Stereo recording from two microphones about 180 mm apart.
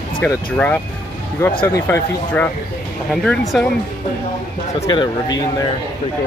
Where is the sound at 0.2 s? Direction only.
5° left (ahead or behind).